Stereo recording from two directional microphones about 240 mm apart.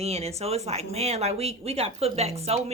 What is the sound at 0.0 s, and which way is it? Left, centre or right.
Speech, right.